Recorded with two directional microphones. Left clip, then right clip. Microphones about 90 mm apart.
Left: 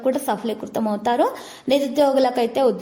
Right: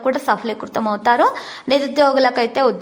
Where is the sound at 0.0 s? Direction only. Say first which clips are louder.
Right 4 dB; 55° left (ahead or behind).